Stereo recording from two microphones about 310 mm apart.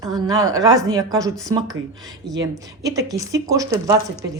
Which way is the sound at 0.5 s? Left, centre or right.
Centre.